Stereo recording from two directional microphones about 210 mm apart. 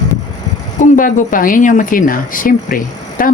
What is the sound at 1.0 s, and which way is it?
Speech, 40° left (ahead or behind).